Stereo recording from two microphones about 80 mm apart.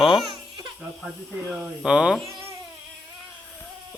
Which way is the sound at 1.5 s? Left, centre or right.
Centre.